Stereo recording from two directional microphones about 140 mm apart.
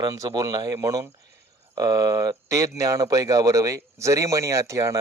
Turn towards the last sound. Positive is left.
turn(degrees=-20)  # may be behind; listen again after turning